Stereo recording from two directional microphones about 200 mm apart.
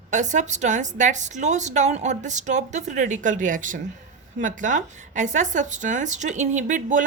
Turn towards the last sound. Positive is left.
turn(degrees=-40)  # may be behind; listen again after turning